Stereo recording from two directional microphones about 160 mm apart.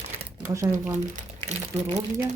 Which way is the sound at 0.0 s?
40° right (ahead or behind).